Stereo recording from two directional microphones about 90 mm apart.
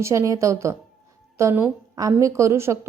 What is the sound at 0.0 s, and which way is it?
A woman's voice, 35° right (ahead or behind).